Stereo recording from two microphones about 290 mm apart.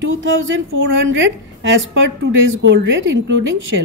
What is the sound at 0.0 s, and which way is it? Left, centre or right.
A woman's voice, right.